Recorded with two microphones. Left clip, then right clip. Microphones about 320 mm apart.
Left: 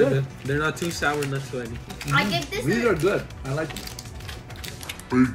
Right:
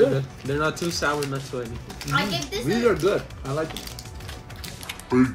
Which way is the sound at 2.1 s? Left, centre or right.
Centre.